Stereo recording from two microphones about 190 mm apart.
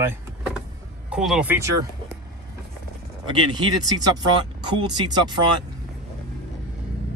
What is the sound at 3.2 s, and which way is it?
Speech, 25° right (ahead or behind).